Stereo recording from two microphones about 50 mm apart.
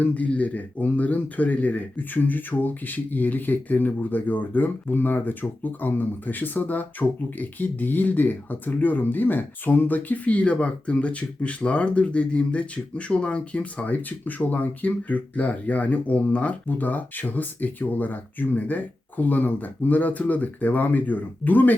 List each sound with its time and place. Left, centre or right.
0.0 s speech: left